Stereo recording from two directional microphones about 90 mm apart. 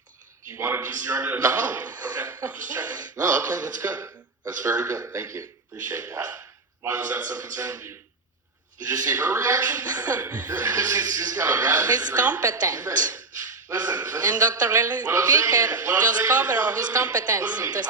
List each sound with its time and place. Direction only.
0.4 s speech: 25° right (ahead or behind); by 2.1 s 45° right (ahead or behind)
2.1 s speech: 30° right (ahead or behind)